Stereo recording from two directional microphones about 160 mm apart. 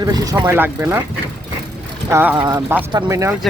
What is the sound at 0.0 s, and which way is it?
Speech, 25° right (ahead or behind).